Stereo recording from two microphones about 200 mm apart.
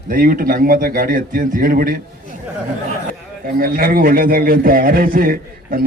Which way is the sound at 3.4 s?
45° right (ahead or behind).